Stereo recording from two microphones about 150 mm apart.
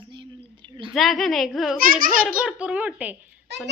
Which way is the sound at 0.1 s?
30° right (ahead or behind).